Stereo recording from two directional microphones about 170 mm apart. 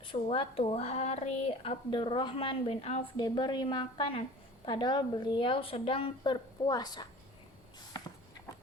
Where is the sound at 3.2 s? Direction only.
25° left (ahead or behind).